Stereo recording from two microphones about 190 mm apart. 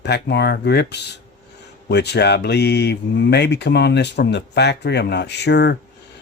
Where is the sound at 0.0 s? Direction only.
60° left (ahead or behind).